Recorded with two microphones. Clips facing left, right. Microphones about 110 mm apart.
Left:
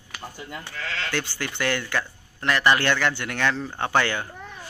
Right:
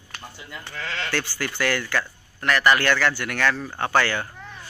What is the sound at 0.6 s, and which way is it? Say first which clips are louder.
Speech: right 2 dB; 15° left (ahead or behind).